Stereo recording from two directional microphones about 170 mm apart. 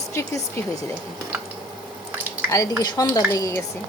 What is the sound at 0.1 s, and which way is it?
Speech, 15° left (ahead or behind).